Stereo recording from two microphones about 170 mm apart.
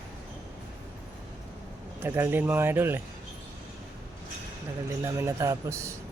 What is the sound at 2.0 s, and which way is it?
Speech, 15° right (ahead or behind).